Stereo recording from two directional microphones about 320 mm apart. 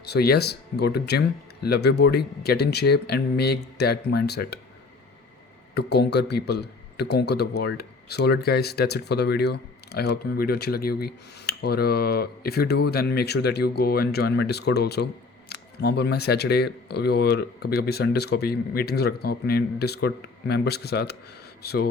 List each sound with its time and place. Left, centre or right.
0.0 s a man's voice: left
5.7 s a man's voice: left